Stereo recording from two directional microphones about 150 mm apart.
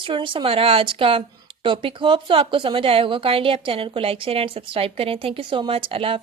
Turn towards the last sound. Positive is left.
turn(degrees=-40)  # may be behind; listen again after turning